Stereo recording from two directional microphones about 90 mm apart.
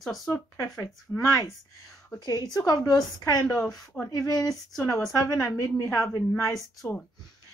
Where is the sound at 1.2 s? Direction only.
35° left (ahead or behind).